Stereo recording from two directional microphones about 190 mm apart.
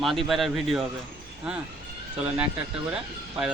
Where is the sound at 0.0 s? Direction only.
Centre (ahead or behind).